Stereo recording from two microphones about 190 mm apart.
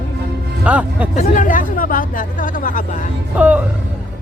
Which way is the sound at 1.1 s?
45° left (ahead or behind).